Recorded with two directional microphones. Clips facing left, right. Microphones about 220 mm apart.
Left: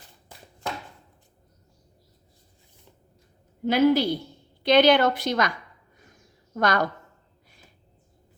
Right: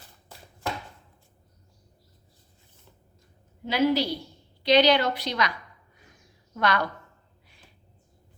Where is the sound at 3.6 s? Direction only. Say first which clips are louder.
Left 4 dB; 50° left (ahead or behind).